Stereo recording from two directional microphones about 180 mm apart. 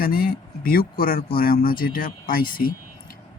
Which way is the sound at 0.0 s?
55° left (ahead or behind).